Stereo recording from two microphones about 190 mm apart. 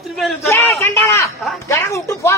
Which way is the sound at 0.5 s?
10° left (ahead or behind).